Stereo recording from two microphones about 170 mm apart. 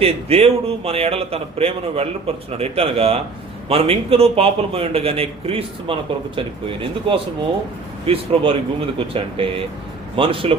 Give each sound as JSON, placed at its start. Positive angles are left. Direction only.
{"t": 0.0, "sound": "a man's voice", "side_deg": -35}